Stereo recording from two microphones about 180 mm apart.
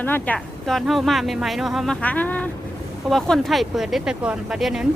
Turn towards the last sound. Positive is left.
turn(degrees=-5)  # may be behind; listen again after turning